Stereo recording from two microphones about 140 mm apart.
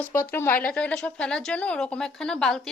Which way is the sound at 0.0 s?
15° left (ahead or behind).